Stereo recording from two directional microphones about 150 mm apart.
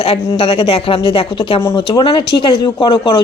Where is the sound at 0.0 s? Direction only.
40° left (ahead or behind).